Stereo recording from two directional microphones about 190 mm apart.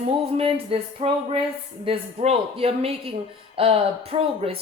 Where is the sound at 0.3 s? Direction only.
30° right (ahead or behind).